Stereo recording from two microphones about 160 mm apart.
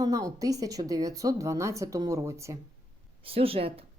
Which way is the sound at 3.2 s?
35° right (ahead or behind).